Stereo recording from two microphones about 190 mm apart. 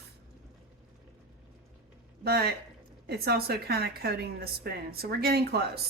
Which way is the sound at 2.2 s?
55° right (ahead or behind).